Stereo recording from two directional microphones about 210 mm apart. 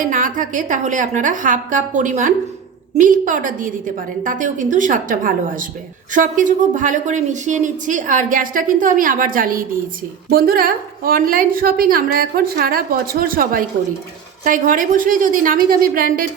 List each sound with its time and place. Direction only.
0.0 s a woman's voice: 40° right (ahead or behind)